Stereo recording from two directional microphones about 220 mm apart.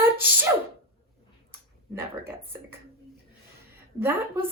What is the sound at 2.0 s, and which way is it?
Speech, 10° right (ahead or behind).